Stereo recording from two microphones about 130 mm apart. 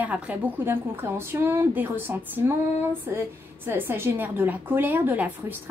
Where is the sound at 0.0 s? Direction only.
10° right (ahead or behind).